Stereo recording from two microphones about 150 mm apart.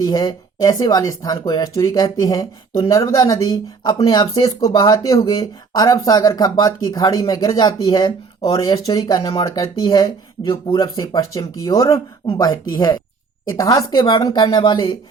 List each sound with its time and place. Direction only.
0.0 s speech: 25° left (ahead or behind)